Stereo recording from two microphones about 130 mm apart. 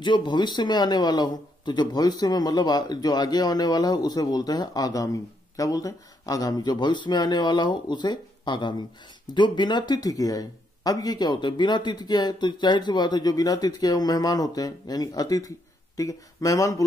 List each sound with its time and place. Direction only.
0.0 s a man's voice: 35° left (ahead or behind)